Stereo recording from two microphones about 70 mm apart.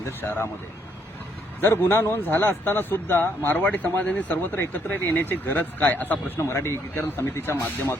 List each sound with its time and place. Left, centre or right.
0.0 s speech: left
1.6 s speech: left
6.4 s speech: left